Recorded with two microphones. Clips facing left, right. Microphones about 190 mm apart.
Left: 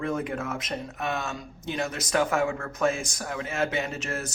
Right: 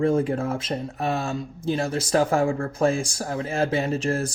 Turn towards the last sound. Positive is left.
turn(degrees=-30)  # may be behind; listen again after turning